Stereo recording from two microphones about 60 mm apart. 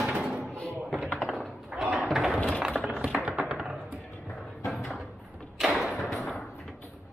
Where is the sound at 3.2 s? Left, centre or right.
Centre.